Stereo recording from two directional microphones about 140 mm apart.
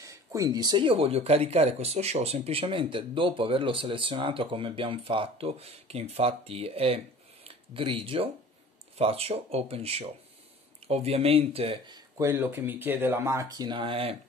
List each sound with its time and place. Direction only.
0.0 s speech: 25° right (ahead or behind); by 12.0 s 40° right (ahead or behind)
12.2 s speech: 20° right (ahead or behind); by 14.1 s 40° right (ahead or behind)